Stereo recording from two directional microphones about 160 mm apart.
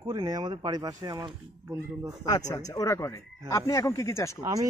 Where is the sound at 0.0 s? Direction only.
30° right (ahead or behind).